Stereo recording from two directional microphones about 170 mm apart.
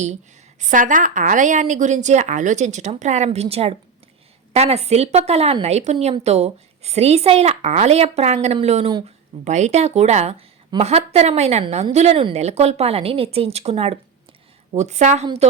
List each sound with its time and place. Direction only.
0.6 s a woman's voice: 50° right (ahead or behind)